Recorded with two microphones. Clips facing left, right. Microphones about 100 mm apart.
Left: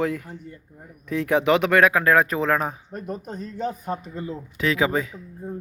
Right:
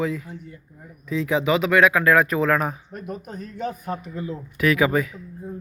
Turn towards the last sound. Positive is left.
turn(degrees=30)  # may be behind; listen again after turning